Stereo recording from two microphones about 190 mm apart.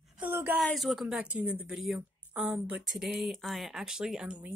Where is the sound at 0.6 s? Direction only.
Centre (ahead or behind).